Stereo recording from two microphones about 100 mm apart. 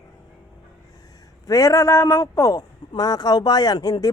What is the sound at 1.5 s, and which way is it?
A man's voice, 35° left (ahead or behind).